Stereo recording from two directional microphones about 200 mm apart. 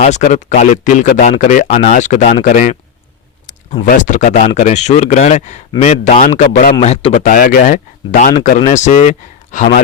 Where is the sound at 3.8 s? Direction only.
40° left (ahead or behind).